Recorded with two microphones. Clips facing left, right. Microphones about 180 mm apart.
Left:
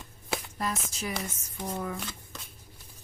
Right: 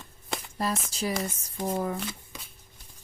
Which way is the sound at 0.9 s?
30° right (ahead or behind).